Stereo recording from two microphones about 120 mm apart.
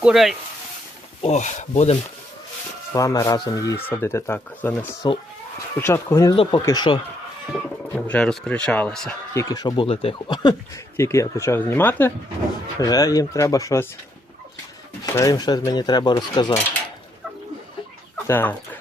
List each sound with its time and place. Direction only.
0.0 s speech: 5° right (ahead or behind)
1.2 s speech: 75° left (ahead or behind)
2.9 s speech: 30° left (ahead or behind)
6.3 s speech: 50° left (ahead or behind)
6.6 s speech: 25° left (ahead or behind)
7.9 s speech: 10° left (ahead or behind)
9.3 s speech: 25° left (ahead or behind)
9.6 s speech: 35° left (ahead or behind)
9.8 s speech: 50° left (ahead or behind)
10.9 s speech: 25° left (ahead or behind)
12.8 s speech: 30° left (ahead or behind)
15.0 s speech: 25° left (ahead or behind)
18.3 s speech: 15° left (ahead or behind)